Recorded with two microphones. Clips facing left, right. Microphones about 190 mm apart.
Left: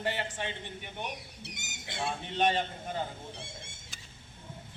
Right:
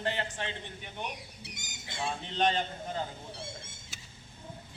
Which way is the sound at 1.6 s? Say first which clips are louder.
Left 3 dB; 65° left (ahead or behind).